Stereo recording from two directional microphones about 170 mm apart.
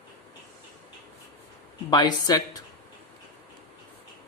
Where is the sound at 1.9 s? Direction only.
25° left (ahead or behind).